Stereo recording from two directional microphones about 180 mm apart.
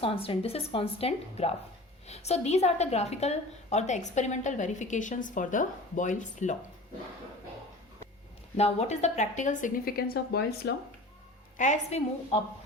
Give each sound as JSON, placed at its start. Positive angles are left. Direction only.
{"t": 0.0, "sound": "a woman's voice", "side_deg": 30}
{"t": 8.5, "sound": "speech", "side_deg": 35}
{"t": 11.5, "sound": "a woman's voice", "side_deg": 40}